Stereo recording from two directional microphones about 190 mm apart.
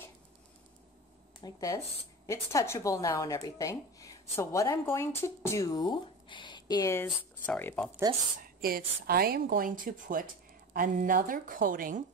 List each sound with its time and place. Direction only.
1.4 s speech: 20° left (ahead or behind)
8.4 s a woman's voice: 50° right (ahead or behind)